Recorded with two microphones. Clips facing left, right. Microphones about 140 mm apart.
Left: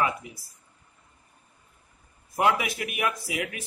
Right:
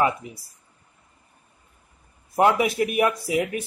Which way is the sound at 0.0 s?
30° right (ahead or behind).